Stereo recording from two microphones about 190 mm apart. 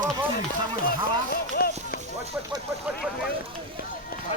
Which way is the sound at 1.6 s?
50° left (ahead or behind).